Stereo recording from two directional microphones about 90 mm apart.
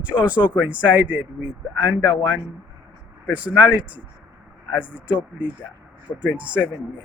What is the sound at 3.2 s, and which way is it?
Speech, 15° right (ahead or behind).